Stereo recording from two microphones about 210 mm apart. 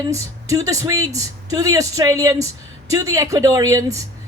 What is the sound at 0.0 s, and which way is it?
A woman's voice, 15° right (ahead or behind).